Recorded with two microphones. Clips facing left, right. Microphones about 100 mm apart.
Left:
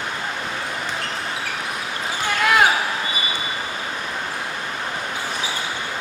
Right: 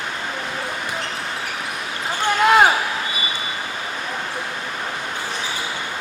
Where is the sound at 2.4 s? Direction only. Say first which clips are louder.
Right 3 dB; 25° right (ahead or behind).